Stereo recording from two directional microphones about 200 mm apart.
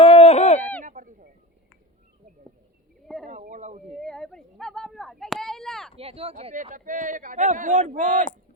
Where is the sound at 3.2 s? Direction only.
40° right (ahead or behind).